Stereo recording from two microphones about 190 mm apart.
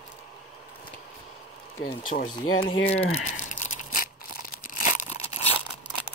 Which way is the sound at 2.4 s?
90° left.